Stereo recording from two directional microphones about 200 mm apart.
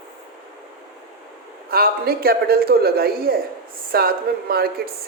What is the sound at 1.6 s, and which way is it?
Speech, 50° right (ahead or behind).